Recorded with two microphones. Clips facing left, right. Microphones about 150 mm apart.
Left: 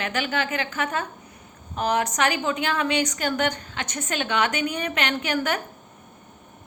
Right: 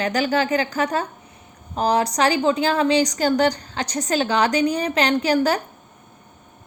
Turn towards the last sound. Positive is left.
turn(degrees=-35)  # may be behind; listen again after turning